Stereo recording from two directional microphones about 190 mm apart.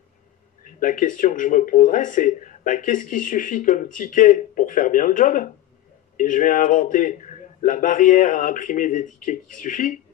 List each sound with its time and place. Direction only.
0.7 s speech: 45° left (ahead or behind)